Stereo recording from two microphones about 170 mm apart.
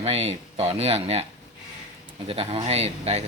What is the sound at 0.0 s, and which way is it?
Speech, 35° right (ahead or behind).